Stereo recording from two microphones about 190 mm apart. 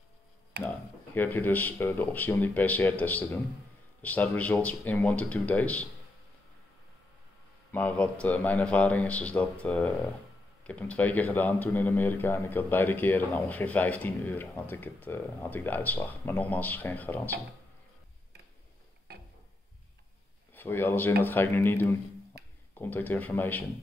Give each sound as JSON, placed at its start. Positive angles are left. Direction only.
{"t": 0.5, "sound": "speech", "side_deg": -60}
{"t": 1.1, "sound": "speech", "side_deg": 10}
{"t": 7.7, "sound": "speech", "side_deg": 5}
{"t": 19.1, "sound": "a sound", "side_deg": -55}
{"t": 20.5, "sound": "speech", "side_deg": 10}